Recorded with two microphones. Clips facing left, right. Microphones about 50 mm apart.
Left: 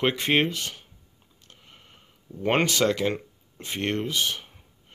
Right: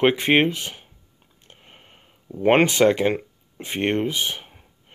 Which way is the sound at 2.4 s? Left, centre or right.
Right.